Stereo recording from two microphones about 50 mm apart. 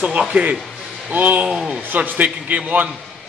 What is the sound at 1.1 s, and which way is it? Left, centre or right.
Speech, right.